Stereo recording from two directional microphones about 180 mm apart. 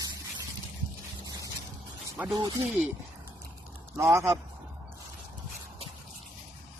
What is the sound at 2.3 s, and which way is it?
Speech, 25° right (ahead or behind).